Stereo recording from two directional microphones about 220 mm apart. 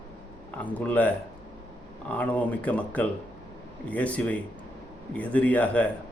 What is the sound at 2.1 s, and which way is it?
Speech, 5° left (ahead or behind).